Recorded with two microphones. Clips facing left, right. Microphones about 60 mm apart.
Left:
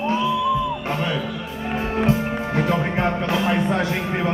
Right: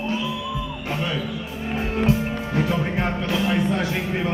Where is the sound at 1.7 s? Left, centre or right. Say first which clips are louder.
Left 1 dB; left.